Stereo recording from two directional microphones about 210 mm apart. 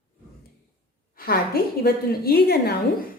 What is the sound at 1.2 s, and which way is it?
A woman's voice, 45° left (ahead or behind).